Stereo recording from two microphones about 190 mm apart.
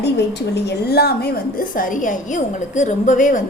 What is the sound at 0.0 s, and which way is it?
A woman's voice, 60° left (ahead or behind).